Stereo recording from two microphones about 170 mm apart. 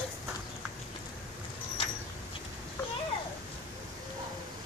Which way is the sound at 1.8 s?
30° left (ahead or behind).